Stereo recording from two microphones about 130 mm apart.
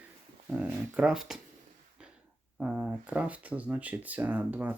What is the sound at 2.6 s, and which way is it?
Speech, 5° right (ahead or behind).